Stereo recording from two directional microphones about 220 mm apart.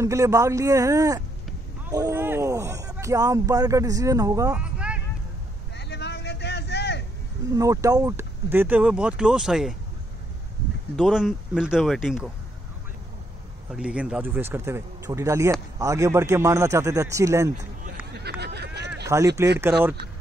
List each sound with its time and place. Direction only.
0.0 s speech: 15° right (ahead or behind)
5.8 s vehicle: 50° left (ahead or behind)
7.5 s speech: 15° right (ahead or behind)
11.0 s speech: centre (ahead or behind)
13.7 s speech: 5° right (ahead or behind)
18.4 s a sound: 50° right (ahead or behind)
19.0 s speech: 15° right (ahead or behind)